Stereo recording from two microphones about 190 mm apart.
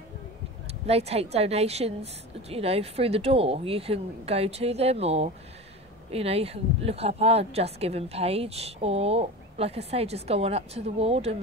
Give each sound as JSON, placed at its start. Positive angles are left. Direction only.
{"t": 0.8, "sound": "speech", "side_deg": -35}